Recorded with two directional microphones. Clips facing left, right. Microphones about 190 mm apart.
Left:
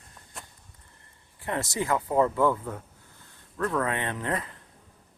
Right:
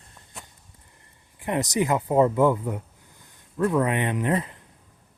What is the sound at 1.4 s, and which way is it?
Speech, 15° right (ahead or behind).